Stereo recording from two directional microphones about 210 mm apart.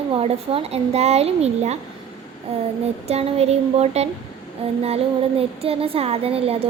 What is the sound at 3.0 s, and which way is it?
Speech, 30° right (ahead or behind).